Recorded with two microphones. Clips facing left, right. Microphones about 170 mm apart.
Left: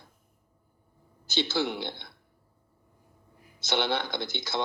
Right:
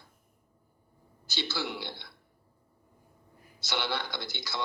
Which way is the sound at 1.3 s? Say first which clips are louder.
Left 6 dB; 20° left (ahead or behind).